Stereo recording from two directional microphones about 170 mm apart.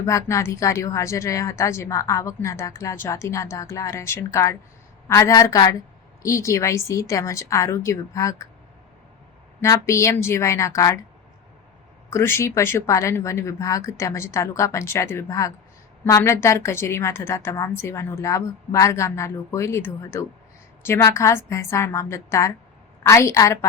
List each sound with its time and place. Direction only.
0.0 s a woman's voice: 15° left (ahead or behind)
9.6 s a woman's voice: 15° left (ahead or behind)
12.1 s a woman's voice: 15° left (ahead or behind)